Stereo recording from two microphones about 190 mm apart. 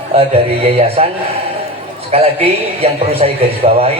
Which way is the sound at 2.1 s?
35° right (ahead or behind).